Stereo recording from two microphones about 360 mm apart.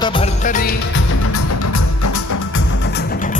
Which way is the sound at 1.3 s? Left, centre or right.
Left.